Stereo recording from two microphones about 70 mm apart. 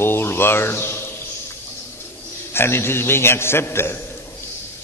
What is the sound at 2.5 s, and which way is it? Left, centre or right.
A man's voice, left.